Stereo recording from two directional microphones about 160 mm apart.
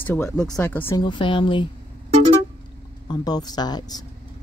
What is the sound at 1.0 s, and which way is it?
Speech, 30° left (ahead or behind).